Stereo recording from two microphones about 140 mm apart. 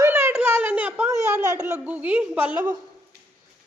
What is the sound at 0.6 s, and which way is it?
Speech, 10° right (ahead or behind).